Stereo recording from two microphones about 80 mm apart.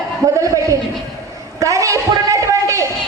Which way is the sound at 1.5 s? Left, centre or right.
Right.